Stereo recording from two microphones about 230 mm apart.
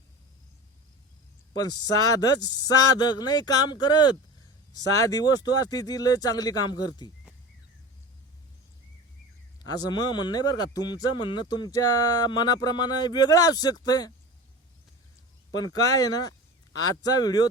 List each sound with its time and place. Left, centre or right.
1.5 s a man's voice: centre
9.6 s a man's voice: centre
15.6 s a man's voice: centre